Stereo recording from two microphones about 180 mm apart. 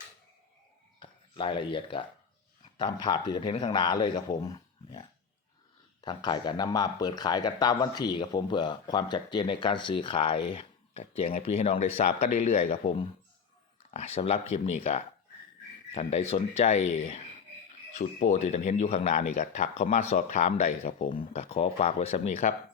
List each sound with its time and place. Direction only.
1.4 s speech: 30° left (ahead or behind)